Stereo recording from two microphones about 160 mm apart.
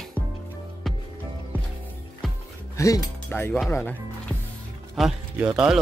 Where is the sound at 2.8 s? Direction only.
20° left (ahead or behind).